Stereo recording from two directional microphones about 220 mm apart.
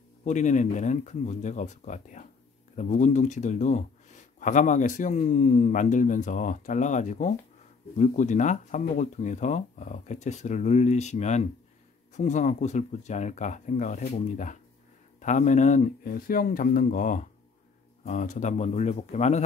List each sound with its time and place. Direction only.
0.2 s a man's voice: 35° left (ahead or behind)